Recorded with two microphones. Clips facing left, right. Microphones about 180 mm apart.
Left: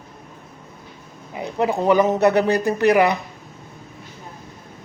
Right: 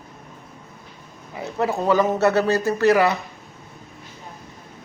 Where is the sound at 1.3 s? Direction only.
15° left (ahead or behind).